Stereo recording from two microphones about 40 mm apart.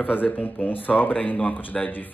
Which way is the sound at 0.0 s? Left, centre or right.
Left.